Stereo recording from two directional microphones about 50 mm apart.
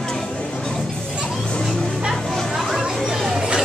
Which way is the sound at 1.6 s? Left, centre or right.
Centre.